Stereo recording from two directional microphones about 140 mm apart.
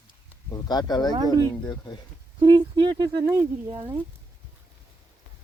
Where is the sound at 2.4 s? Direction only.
30° right (ahead or behind).